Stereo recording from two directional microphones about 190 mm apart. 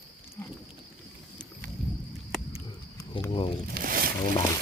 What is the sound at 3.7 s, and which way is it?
Zipper, 50° right (ahead or behind).